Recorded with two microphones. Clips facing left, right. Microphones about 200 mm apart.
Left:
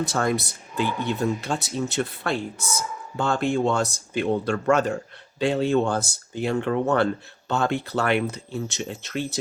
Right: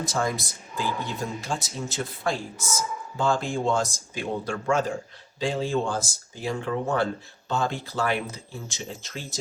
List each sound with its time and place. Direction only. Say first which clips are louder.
0.0 s speech: left 4 dB; 65° left (ahead or behind)